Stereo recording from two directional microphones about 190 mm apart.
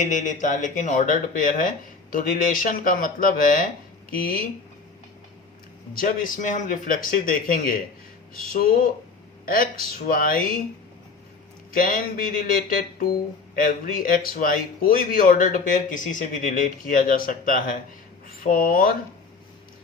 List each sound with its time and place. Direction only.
0.0 s speech: 40° left (ahead or behind)
5.9 s speech: 50° left (ahead or behind)
11.7 s speech: 50° left (ahead or behind)